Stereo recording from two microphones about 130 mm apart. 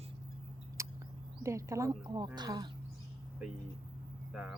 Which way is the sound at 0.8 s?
20° right (ahead or behind).